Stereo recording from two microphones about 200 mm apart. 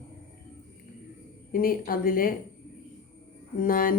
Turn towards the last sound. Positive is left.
turn(degrees=45)  # may be behind; listen again after turning